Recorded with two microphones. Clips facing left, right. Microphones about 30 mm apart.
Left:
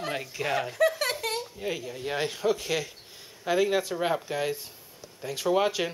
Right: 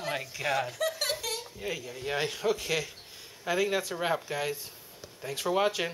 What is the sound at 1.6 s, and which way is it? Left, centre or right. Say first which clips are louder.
Speech: left 3 dB; centre.